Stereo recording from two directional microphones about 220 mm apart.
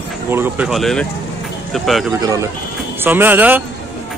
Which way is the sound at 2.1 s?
15° right (ahead or behind).